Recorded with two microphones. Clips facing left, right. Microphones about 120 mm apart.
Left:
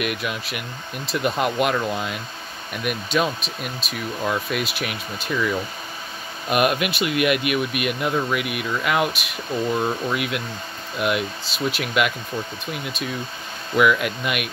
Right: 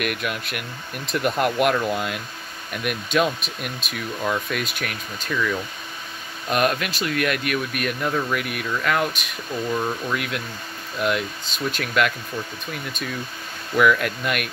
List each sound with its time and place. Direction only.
0.0 s speech: centre (ahead or behind)